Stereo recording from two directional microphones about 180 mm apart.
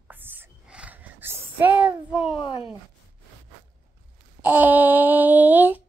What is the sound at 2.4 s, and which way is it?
Speech, 25° left (ahead or behind).